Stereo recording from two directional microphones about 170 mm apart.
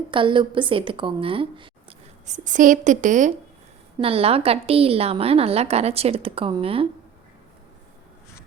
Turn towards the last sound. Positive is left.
turn(degrees=-35)  # may be behind; listen again after turning